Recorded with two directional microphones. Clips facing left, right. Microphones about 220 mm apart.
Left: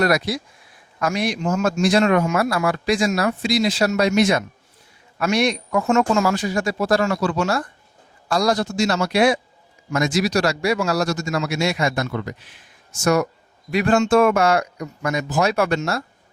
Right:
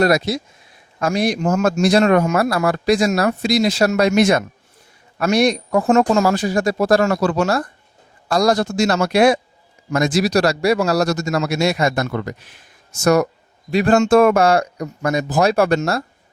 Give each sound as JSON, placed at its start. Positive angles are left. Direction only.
{"t": 0.0, "sound": "a man's voice", "side_deg": -25}
{"t": 9.9, "sound": "speech", "side_deg": -35}
{"t": 13.7, "sound": "speech", "side_deg": -30}
{"t": 13.9, "sound": "speech", "side_deg": -40}